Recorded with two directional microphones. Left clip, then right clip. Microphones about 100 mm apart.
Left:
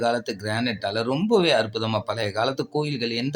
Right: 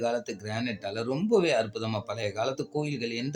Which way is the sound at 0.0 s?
25° left (ahead or behind).